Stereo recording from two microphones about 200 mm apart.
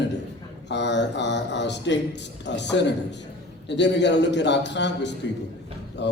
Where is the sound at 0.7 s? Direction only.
60° left (ahead or behind).